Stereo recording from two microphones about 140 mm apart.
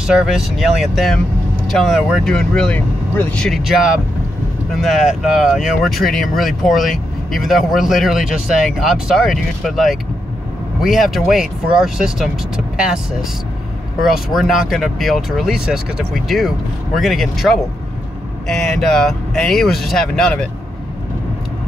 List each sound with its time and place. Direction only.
0.0 s speech: 5° right (ahead or behind)